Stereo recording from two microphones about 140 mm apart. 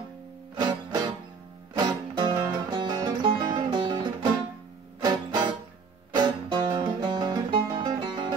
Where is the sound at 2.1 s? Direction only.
30° right (ahead or behind).